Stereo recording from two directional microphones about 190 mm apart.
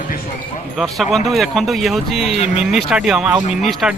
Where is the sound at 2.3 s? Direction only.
35° left (ahead or behind).